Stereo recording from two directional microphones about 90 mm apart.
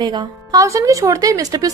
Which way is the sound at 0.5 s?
35° right (ahead or behind).